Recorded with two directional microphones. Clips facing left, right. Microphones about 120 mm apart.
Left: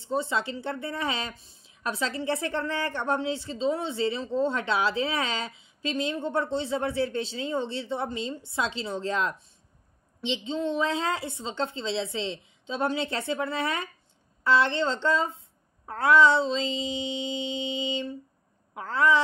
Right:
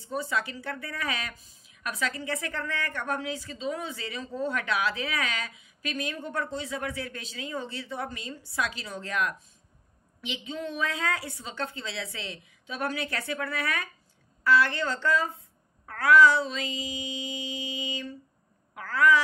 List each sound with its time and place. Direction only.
0.0 s speech: 25° left (ahead or behind)